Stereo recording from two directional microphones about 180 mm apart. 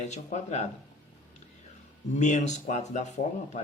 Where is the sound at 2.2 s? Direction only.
40° left (ahead or behind).